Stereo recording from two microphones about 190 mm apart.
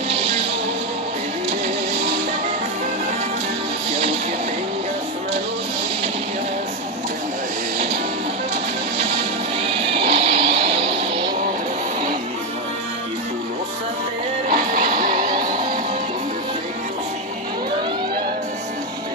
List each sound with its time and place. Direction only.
0.1 s music: 30° right (ahead or behind)
9.7 s music: 30° right (ahead or behind)
14.5 s music: 45° right (ahead or behind)